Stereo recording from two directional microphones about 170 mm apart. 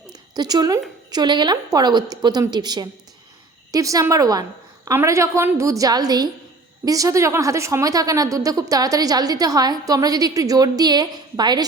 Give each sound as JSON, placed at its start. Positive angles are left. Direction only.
{"t": 0.1, "sound": "a woman's voice", "side_deg": -25}